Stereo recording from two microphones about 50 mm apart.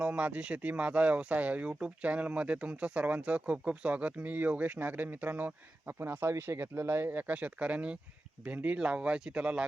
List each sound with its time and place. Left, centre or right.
0.0 s speech: right
7.1 s speech: right